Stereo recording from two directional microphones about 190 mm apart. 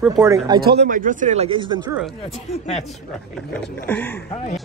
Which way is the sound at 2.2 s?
35° left (ahead or behind).